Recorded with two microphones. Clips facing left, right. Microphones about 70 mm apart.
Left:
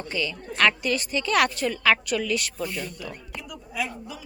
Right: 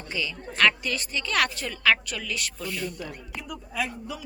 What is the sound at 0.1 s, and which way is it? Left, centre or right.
A woman's voice, centre.